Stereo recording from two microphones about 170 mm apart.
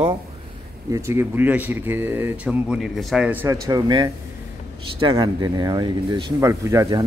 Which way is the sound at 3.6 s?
20° right (ahead or behind).